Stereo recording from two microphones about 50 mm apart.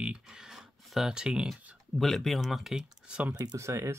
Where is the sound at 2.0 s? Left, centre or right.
Centre.